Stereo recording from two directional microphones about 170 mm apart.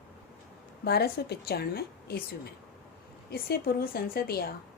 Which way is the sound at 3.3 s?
65° left (ahead or behind).